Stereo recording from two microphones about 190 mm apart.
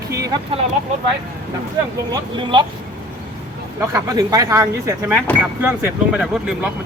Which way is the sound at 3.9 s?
20° right (ahead or behind).